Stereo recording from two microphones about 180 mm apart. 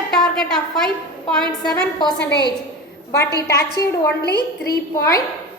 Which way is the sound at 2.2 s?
65° left (ahead or behind).